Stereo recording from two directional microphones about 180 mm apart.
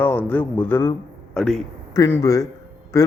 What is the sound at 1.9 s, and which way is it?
A man's voice, 15° left (ahead or behind).